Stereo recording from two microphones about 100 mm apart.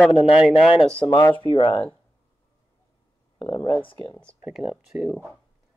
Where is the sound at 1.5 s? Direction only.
60° left (ahead or behind).